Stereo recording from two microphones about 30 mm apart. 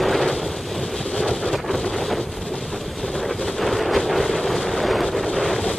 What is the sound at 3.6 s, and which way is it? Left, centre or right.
Vehicle, centre.